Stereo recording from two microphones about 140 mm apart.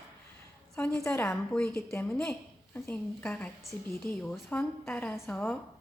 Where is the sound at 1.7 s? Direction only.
15° left (ahead or behind).